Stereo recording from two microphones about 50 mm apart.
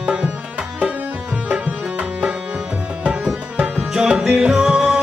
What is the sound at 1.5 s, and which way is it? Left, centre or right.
Music, right.